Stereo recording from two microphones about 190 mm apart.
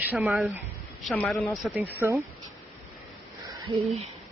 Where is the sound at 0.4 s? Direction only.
Centre (ahead or behind).